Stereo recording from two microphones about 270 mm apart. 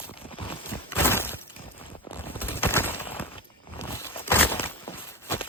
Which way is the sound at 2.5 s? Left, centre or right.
Centre.